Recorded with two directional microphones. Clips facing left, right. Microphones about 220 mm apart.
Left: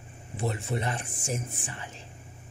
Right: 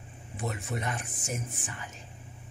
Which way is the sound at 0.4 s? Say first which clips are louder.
Left 4 dB; 30° left (ahead or behind).